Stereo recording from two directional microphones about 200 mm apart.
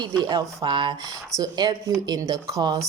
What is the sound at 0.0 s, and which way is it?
A woman's voice, 20° right (ahead or behind).